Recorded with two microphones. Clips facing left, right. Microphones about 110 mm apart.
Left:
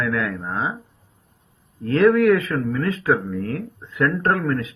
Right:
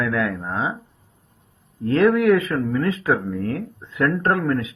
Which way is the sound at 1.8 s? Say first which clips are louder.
Left 1 dB; 25° right (ahead or behind).